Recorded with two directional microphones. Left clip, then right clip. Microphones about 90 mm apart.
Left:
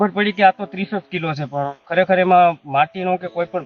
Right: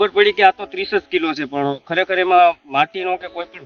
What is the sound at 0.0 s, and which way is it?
Speech, 35° right (ahead or behind).